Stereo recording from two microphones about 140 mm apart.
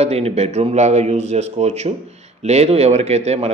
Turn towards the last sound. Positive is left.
turn(degrees=-50)  # may be behind; listen again after turning